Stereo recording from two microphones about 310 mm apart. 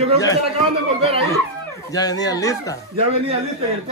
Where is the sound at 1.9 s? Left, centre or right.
Centre.